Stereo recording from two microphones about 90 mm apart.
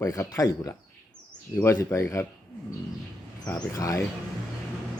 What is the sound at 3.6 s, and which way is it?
Speech, 40° left (ahead or behind).